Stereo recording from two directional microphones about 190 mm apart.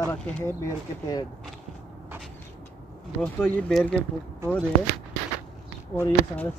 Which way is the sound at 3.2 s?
5° left (ahead or behind).